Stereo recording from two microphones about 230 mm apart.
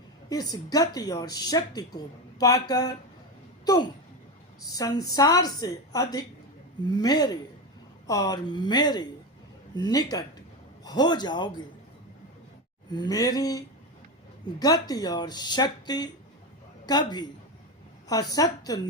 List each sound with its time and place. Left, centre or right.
0.3 s a woman's voice: centre
4.6 s a woman's voice: centre
12.9 s a woman's voice: centre